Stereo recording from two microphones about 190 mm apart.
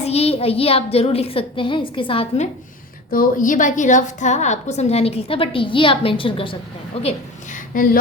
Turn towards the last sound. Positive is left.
turn(degrees=45)  # may be behind; listen again after turning